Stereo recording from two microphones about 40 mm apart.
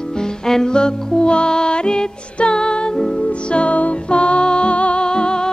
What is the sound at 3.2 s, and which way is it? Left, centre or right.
Music, left.